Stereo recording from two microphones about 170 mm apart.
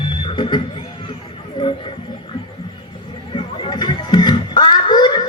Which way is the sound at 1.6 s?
30° left (ahead or behind).